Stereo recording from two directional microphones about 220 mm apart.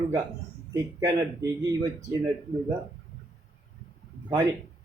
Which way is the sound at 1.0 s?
15° right (ahead or behind).